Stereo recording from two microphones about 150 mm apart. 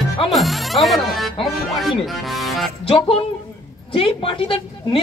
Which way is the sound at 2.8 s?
40° left (ahead or behind).